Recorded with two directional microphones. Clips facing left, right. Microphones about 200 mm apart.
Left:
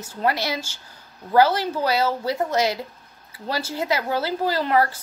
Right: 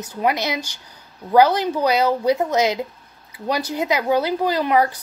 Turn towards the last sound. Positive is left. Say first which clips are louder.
# right 2 dB
turn(degrees=-15)  # may be behind; listen again after turning